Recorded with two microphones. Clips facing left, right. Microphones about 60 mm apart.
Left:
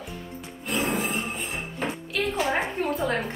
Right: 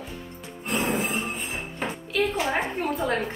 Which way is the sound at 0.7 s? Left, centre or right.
Right.